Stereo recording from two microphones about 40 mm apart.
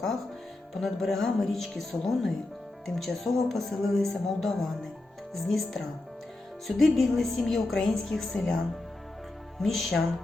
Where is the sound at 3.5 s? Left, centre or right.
Centre.